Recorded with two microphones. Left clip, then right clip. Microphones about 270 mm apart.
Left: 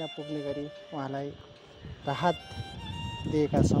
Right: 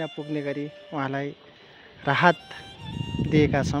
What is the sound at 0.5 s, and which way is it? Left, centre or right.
Speech, right.